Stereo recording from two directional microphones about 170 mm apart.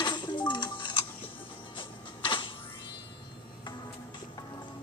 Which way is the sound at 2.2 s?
30° left (ahead or behind).